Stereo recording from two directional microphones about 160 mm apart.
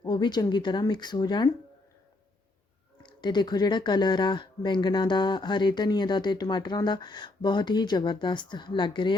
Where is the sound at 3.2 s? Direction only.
25° left (ahead or behind).